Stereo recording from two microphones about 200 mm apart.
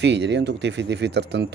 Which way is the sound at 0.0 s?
60° right (ahead or behind).